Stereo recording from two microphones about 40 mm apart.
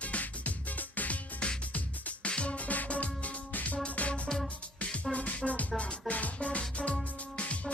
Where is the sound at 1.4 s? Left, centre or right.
Left.